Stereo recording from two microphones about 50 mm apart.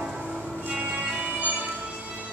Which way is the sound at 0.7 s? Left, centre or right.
Centre.